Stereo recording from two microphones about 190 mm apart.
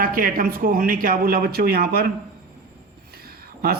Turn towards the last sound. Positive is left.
turn(degrees=-55)  # may be behind; listen again after turning